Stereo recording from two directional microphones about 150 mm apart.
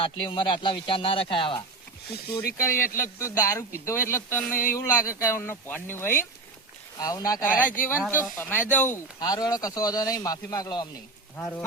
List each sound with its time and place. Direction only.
0.0 s speech: 35° left (ahead or behind)
2.9 s speech: 15° left (ahead or behind)
7.4 s speech: 60° left (ahead or behind)
7.8 s speech: 15° left (ahead or behind)
9.3 s speech: 25° left (ahead or behind)
11.3 s speech: 10° left (ahead or behind)